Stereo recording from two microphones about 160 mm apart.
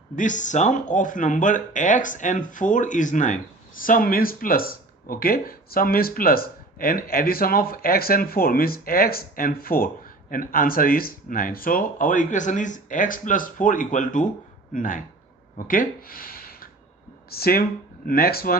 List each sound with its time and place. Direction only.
0.2 s speech: 50° left (ahead or behind); by 18.6 s 70° left (ahead or behind)